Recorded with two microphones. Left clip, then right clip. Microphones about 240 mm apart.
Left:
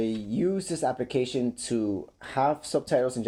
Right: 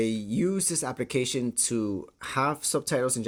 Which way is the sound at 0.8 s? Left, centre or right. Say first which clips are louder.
Left 6 dB; right.